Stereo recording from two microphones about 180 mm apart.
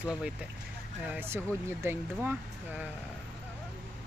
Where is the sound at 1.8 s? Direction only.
15° right (ahead or behind).